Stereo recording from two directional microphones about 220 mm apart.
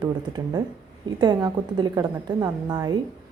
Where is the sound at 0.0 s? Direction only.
20° right (ahead or behind).